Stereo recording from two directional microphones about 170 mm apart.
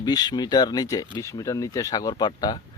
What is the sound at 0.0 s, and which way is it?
Speech, 25° left (ahead or behind).